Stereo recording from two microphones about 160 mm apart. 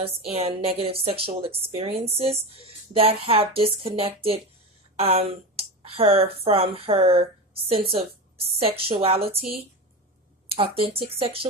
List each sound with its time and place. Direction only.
0.0 s a woman's voice: 40° right (ahead or behind)